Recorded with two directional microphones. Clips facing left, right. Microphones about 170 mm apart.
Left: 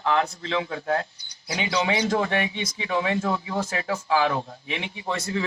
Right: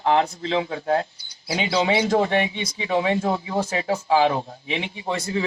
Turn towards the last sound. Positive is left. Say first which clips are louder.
# right 2 dB
turn(degrees=-30)  # may be behind; listen again after turning